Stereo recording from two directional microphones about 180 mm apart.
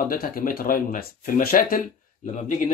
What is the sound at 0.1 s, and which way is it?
Speech, 55° left (ahead or behind).